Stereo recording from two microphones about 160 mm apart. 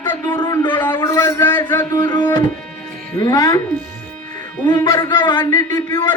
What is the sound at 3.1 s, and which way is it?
Speech, 25° left (ahead or behind).